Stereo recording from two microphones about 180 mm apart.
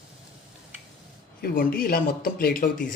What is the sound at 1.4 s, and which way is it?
Speech, 55° left (ahead or behind).